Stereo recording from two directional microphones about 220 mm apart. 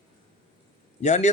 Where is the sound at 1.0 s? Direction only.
30° left (ahead or behind).